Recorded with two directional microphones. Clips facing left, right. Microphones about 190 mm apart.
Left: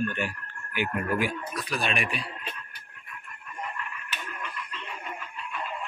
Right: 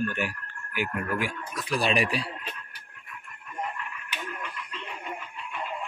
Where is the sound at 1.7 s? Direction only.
35° right (ahead or behind).